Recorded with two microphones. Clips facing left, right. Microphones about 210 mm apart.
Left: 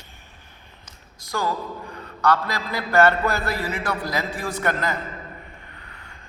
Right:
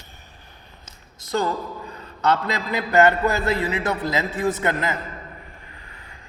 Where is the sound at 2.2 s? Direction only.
20° right (ahead or behind).